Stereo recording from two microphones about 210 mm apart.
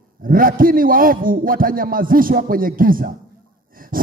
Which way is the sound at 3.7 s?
40° right (ahead or behind).